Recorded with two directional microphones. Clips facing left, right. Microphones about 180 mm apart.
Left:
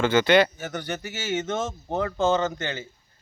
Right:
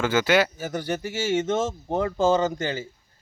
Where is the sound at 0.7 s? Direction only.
30° right (ahead or behind).